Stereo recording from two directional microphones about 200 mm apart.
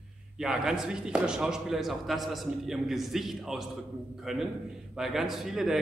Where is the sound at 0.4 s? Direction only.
5° right (ahead or behind).